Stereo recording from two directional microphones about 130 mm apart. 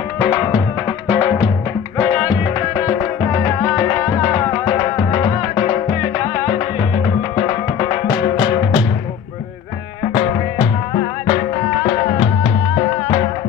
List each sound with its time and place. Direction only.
4.1 s music: 25° left (ahead or behind)
4.5 s music: 40° left (ahead or behind)
8.1 s music: 40° left (ahead or behind)
12.7 s music: 40° left (ahead or behind)